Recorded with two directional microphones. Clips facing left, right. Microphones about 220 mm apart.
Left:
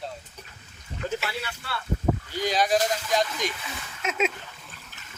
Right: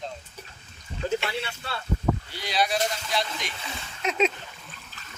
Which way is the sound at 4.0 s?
5° left (ahead or behind).